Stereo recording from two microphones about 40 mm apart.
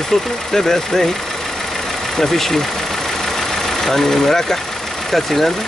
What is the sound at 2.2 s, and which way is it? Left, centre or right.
Speech, centre.